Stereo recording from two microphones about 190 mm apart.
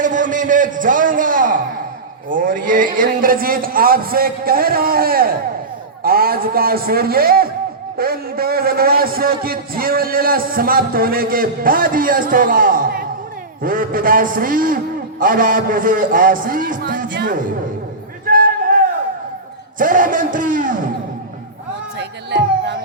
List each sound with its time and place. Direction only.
0.0 s a man's voice: 40° right (ahead or behind)
18.3 s a sound: 45° right (ahead or behind)
19.8 s a man's voice: 45° right (ahead or behind)
21.9 s speech: 65° right (ahead or behind)